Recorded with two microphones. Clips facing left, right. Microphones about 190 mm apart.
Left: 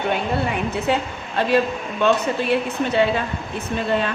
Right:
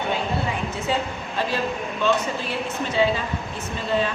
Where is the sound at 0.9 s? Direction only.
65° left (ahead or behind).